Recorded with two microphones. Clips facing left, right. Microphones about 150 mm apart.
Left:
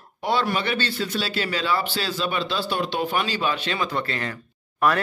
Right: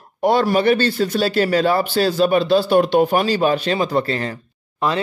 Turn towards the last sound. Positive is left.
turn(degrees=-25)  # may be behind; listen again after turning